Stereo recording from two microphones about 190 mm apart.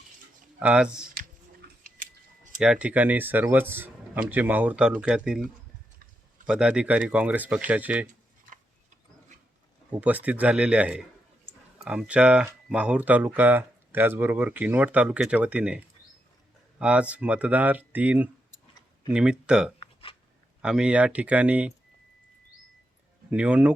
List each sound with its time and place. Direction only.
0.6 s speech: 5° right (ahead or behind)
1.6 s chewing: 45° right (ahead or behind)
2.6 s speech: 5° right (ahead or behind)
9.9 s speech: 10° right (ahead or behind)
19.8 s a sound: 30° left (ahead or behind)
20.6 s speech: 5° right (ahead or behind)
23.3 s speech: 5° right (ahead or behind)